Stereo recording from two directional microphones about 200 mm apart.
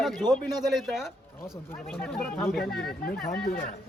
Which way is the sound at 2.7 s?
50° left (ahead or behind).